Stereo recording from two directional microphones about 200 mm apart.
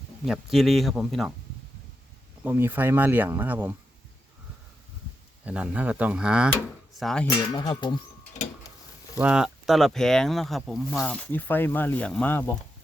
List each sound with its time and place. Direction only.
0.3 s speech: centre (ahead or behind)
2.4 s speech: 10° right (ahead or behind)
5.5 s speech: 5° right (ahead or behind)
7.5 s speech: 25° left (ahead or behind)
9.1 s speech: 5° right (ahead or behind)